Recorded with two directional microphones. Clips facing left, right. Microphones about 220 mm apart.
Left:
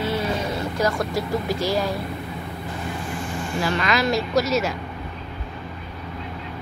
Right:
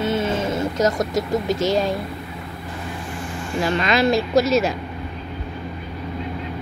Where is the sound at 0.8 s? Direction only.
20° right (ahead or behind).